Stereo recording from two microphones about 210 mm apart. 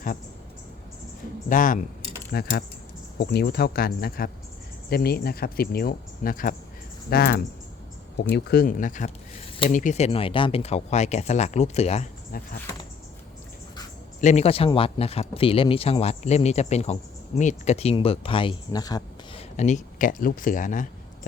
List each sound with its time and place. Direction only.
1.5 s speech: 40° left (ahead or behind)
12.3 s speech: 45° left (ahead or behind)
14.2 s speech: 35° left (ahead or behind)